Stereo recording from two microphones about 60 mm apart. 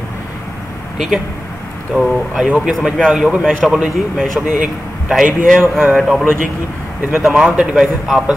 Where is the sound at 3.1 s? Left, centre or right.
Centre.